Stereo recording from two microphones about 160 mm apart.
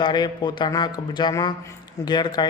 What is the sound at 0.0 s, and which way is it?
A man's voice, 30° left (ahead or behind).